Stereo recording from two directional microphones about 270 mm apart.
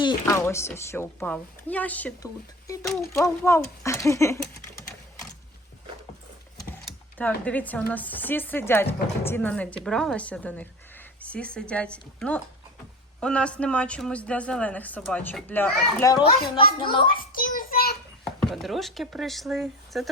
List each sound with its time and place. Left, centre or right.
0.0 s speech: centre
6.8 s speech: centre
17.1 s child singing: left
18.4 s speech: centre